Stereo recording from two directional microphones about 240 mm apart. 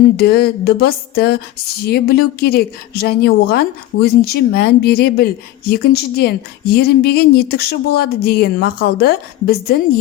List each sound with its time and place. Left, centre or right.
0.2 s a woman's voice: left